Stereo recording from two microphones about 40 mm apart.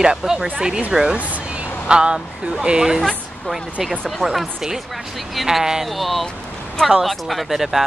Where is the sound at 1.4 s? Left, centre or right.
Right.